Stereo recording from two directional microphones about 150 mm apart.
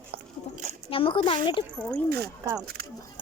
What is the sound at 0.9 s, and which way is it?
Speech, 35° left (ahead or behind).